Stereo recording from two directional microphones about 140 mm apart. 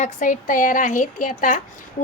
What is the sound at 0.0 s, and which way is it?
Speech, 65° left (ahead or behind).